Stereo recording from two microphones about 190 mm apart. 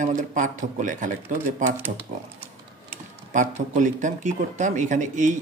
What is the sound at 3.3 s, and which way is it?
Speech, 40° right (ahead or behind).